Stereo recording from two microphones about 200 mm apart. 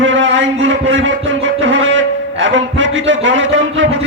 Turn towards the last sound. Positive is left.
turn(degrees=-65)  # may be behind; listen again after turning